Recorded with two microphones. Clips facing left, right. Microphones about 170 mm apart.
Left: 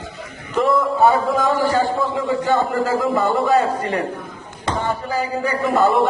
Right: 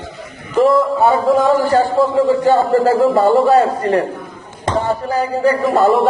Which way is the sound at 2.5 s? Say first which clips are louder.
Right 6 dB; 40° right (ahead or behind).